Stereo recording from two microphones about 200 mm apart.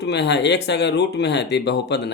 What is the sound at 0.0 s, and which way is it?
Speech, 60° left (ahead or behind).